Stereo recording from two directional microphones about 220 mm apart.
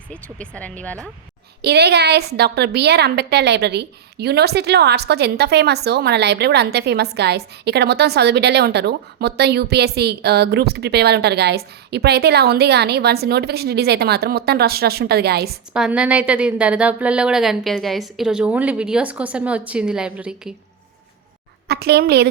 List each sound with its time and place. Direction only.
0.1 s a woman's voice: 5° left (ahead or behind)
1.6 s a woman's voice: 50° right (ahead or behind)
15.7 s a woman's voice: 5° right (ahead or behind)
21.7 s a woman's voice: 50° right (ahead or behind)